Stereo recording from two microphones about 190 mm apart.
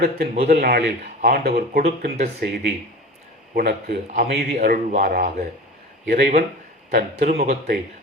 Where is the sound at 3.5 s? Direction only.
55° right (ahead or behind).